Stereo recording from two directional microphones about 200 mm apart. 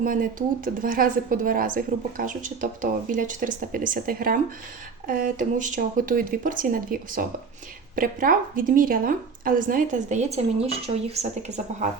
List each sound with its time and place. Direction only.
0.0 s a woman's voice: 45° right (ahead or behind)